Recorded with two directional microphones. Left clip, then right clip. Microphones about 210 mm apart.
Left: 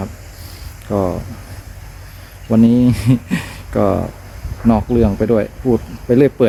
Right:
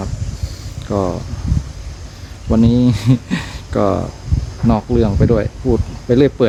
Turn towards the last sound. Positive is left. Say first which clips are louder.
# left 1 dB
turn(degrees=5)  # may be behind; listen again after turning